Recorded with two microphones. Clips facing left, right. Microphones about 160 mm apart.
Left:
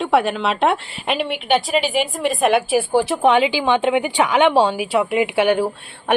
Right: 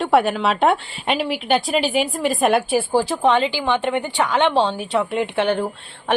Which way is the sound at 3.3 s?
15° left (ahead or behind).